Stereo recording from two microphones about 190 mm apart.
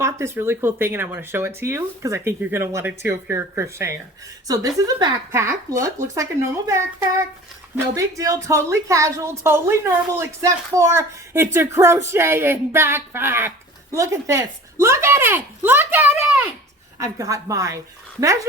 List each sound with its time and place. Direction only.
0.0 s a woman's voice: 15° right (ahead or behind)
7.9 s a woman's voice: 15° right (ahead or behind)